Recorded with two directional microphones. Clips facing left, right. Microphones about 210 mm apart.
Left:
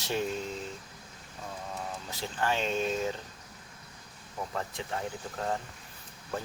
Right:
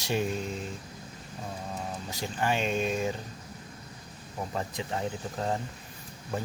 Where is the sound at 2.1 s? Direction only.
15° right (ahead or behind).